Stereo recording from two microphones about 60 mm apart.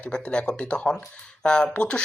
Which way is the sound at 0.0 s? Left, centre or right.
Centre.